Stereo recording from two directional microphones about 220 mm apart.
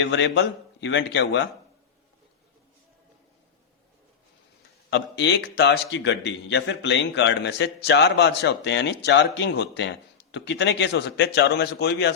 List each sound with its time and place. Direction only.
0.0 s a man's voice: 55° left (ahead or behind)
4.9 s a man's voice: 50° left (ahead or behind)